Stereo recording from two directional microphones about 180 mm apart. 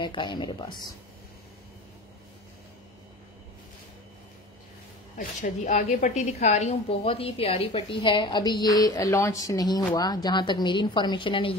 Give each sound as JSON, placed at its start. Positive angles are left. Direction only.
{"t": 0.0, "sound": "a woman's voice", "side_deg": 25}
{"t": 5.1, "sound": "a woman's voice", "side_deg": 45}